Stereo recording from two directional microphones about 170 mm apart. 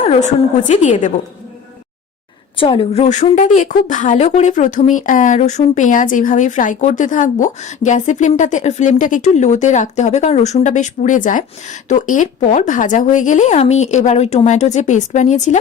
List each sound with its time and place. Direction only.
0.7 s speech: 45° left (ahead or behind)
2.6 s speech: 30° left (ahead or behind)